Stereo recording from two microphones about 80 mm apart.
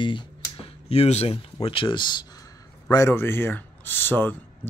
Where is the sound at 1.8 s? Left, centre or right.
Left.